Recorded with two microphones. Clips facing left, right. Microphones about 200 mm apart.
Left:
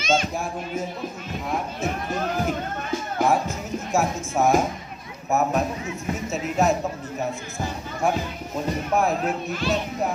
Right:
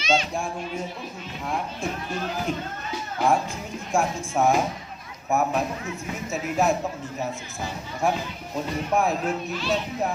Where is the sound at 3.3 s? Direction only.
5° left (ahead or behind).